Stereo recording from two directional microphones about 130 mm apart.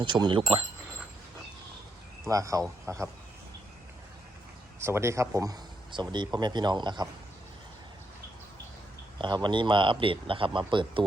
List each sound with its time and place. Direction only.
0.0 s speech: 35° right (ahead or behind)
2.2 s speech: 25° right (ahead or behind)
4.8 s speech: 20° right (ahead or behind); by 7.1 s 35° right (ahead or behind)
9.1 s speech: 35° right (ahead or behind)